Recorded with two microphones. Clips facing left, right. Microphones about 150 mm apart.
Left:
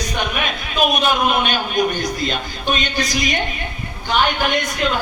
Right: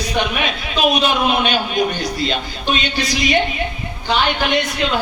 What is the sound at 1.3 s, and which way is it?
A man's voice, 45° left (ahead or behind).